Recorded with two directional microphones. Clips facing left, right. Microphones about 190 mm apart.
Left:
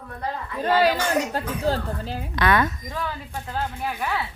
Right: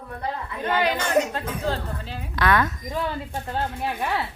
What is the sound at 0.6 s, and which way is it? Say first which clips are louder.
A woman's voice: left 4 dB; 35° left (ahead or behind).